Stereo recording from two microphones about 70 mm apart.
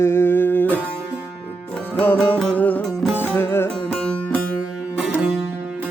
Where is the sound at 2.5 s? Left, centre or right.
Left.